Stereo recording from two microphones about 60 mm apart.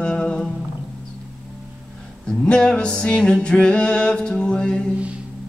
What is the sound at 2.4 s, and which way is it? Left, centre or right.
Music, centre.